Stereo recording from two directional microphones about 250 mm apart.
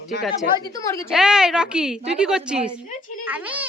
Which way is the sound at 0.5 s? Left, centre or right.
Centre.